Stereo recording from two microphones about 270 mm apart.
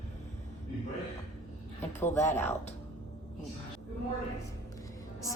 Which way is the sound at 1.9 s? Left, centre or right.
Centre.